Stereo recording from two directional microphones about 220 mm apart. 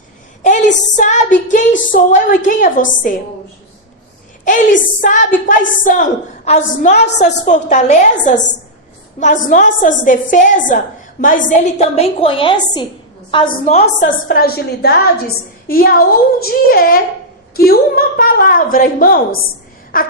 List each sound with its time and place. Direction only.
0.4 s a woman's voice: 35° left (ahead or behind)
4.4 s a woman's voice: 35° left (ahead or behind)
11.9 s a woman's voice: 25° left (ahead or behind)